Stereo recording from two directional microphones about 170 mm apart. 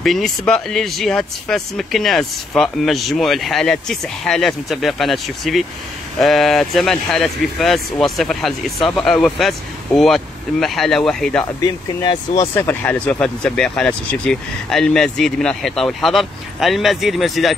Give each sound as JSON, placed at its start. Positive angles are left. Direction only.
{"t": 0.0, "sound": "speech", "side_deg": 0}
{"t": 11.6, "sound": "speech", "side_deg": 25}
{"t": 12.5, "sound": "speech", "side_deg": 10}